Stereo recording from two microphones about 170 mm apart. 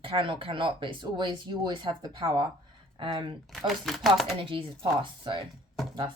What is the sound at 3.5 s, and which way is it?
Speech, centre (ahead or behind).